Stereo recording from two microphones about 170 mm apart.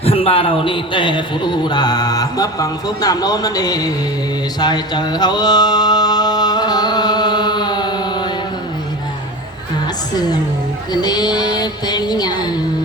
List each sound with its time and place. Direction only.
0.0 s a man's voice: 35° left (ahead or behind)
4.6 s mantra: 25° left (ahead or behind)
10.9 s mantra: 25° left (ahead or behind)